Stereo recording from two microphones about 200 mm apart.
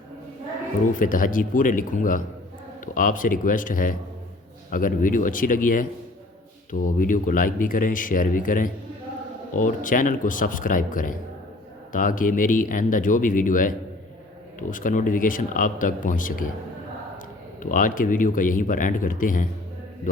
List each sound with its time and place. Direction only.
0.9 s speech: 40° left (ahead or behind)
17.6 s speech: 40° left (ahead or behind)